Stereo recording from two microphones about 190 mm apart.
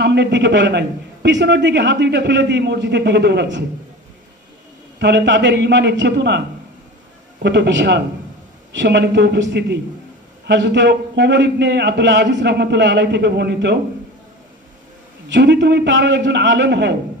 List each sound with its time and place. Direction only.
0.0 s a man's voice: 65° right (ahead or behind)
4.9 s a man's voice: 65° right (ahead or behind)
7.4 s a man's voice: 65° right (ahead or behind)
15.3 s a man's voice: 65° right (ahead or behind)